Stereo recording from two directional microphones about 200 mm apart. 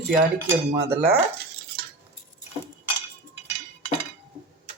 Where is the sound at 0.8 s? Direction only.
10° right (ahead or behind).